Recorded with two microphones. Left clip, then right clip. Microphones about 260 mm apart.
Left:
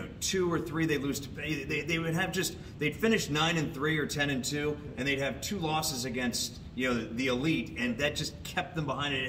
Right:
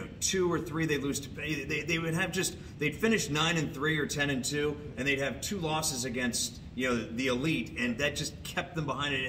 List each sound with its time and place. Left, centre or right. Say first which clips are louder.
0.2 s a man's voice: right 1 dB; centre